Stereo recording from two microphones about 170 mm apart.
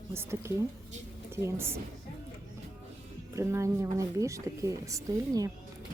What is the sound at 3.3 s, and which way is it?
Speech, 15° right (ahead or behind).